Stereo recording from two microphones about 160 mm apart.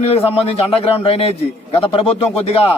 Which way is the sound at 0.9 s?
35° left (ahead or behind).